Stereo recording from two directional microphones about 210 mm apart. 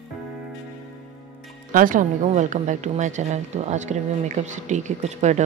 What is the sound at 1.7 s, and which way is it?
A woman's voice, 40° right (ahead or behind).